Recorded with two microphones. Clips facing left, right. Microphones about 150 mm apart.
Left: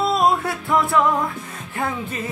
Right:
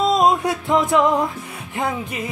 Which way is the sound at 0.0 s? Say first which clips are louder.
Right 2 dB; 20° right (ahead or behind).